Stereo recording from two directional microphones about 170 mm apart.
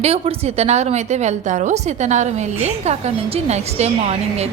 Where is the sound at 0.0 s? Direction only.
35° right (ahead or behind).